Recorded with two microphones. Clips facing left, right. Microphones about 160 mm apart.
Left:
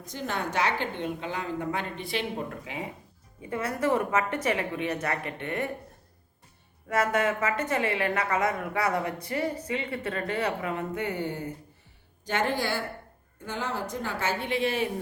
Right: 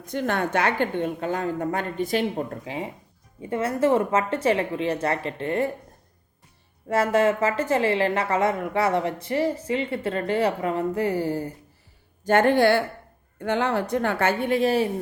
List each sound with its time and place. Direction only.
0.0 s a woman's voice: 60° right (ahead or behind); by 5.7 s 30° right (ahead or behind)
6.8 s a woman's voice: 30° right (ahead or behind)
12.2 s a woman's voice: 55° right (ahead or behind)